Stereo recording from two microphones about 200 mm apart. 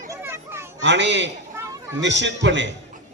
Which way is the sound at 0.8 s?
60° right (ahead or behind).